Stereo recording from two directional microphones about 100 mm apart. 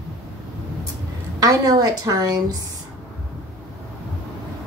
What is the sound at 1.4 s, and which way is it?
Speech, 40° right (ahead or behind).